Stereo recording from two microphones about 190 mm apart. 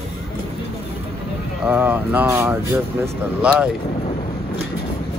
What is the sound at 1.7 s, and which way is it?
Speech, 10° right (ahead or behind).